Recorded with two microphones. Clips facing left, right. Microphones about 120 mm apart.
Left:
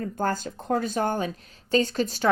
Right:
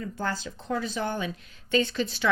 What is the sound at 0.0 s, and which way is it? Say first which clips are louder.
A woman's voice: left 5 dB; 45° left (ahead or behind).